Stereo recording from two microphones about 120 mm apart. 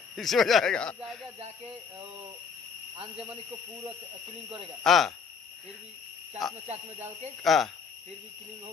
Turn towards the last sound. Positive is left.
turn(degrees=0)  # may be behind; listen again after turning